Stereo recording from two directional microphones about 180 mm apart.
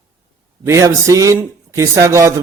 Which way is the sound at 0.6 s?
15° right (ahead or behind).